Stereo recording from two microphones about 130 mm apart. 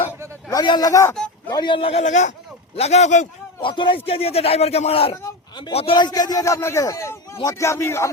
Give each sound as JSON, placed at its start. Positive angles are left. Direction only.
{"t": 0.5, "sound": "a man's voice", "side_deg": 35}
{"t": 3.6, "sound": "speech", "side_deg": 40}
{"t": 5.2, "sound": "a sound", "side_deg": 35}
{"t": 5.7, "sound": "speech", "side_deg": 50}
{"t": 6.0, "sound": "a man's voice", "side_deg": 30}